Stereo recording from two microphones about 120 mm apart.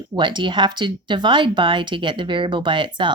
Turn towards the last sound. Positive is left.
turn(degrees=-40)  # may be behind; listen again after turning